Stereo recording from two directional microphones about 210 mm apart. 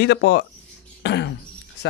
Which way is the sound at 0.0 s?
50° left (ahead or behind).